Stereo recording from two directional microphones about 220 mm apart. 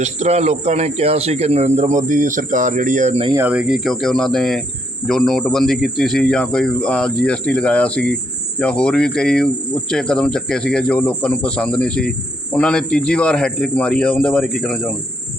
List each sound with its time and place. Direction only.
0.0 s a man's voice: 30° right (ahead or behind)
3.2 s speech: 10° right (ahead or behind)